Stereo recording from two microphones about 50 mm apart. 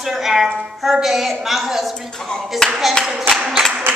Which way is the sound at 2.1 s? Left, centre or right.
Centre.